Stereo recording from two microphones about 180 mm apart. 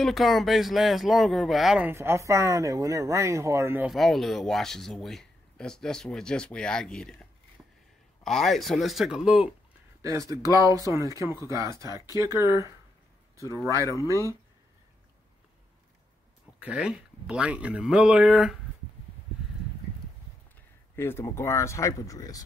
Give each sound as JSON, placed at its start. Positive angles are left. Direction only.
{"t": 0.0, "sound": "speech", "side_deg": 0}
{"t": 3.9, "sound": "speech", "side_deg": 0}
{"t": 10.0, "sound": "speech", "side_deg": -15}
{"t": 13.7, "sound": "speech", "side_deg": 15}
{"t": 16.5, "sound": "speech", "side_deg": -5}
{"t": 20.9, "sound": "speech", "side_deg": 15}